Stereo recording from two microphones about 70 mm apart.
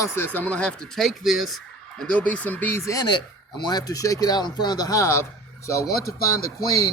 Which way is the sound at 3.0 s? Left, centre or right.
Left.